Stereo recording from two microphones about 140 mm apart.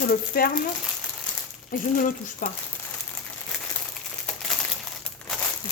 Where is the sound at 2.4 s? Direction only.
75° left (ahead or behind).